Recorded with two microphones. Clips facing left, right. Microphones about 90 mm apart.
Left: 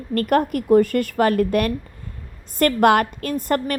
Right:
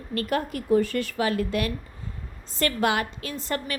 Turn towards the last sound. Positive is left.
turn(degrees=50)  # may be behind; listen again after turning